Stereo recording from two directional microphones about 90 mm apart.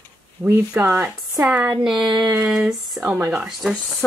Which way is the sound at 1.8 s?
5° right (ahead or behind).